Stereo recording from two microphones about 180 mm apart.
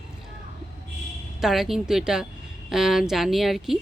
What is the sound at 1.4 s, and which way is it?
Speech, centre (ahead or behind).